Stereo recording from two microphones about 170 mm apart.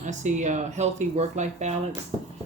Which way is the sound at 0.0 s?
45° right (ahead or behind).